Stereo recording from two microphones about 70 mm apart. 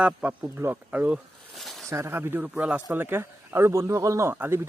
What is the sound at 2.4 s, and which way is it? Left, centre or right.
A man's voice, centre.